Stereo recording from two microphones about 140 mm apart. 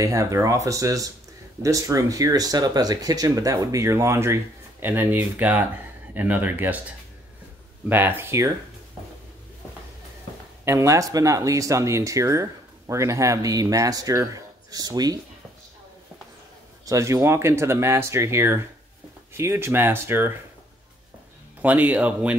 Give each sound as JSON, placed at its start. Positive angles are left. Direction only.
{"t": 0.0, "sound": "speech", "side_deg": -20}
{"t": 7.9, "sound": "speech", "side_deg": -15}
{"t": 10.6, "sound": "speech", "side_deg": -20}
{"t": 16.8, "sound": "speech", "side_deg": -20}
{"t": 21.5, "sound": "speech", "side_deg": -10}